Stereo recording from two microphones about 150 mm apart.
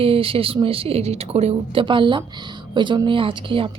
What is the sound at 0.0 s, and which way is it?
Speech, 40° right (ahead or behind).